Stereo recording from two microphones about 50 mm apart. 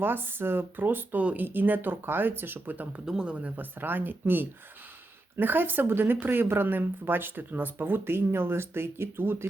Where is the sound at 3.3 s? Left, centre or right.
Right.